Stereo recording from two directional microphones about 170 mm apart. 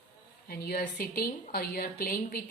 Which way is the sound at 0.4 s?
65° left (ahead or behind).